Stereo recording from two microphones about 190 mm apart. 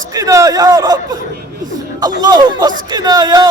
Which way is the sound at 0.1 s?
20° right (ahead or behind).